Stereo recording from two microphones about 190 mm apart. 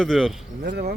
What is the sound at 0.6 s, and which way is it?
Speech, 55° right (ahead or behind).